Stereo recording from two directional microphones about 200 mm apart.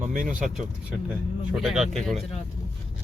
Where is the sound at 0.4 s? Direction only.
5° right (ahead or behind).